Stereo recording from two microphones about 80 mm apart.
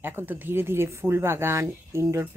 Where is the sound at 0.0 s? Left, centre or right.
Right.